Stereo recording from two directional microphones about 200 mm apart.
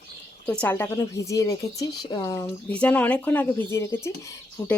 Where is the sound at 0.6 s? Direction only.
10° left (ahead or behind).